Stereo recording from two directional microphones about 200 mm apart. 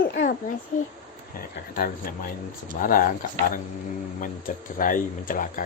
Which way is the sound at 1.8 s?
45° left (ahead or behind).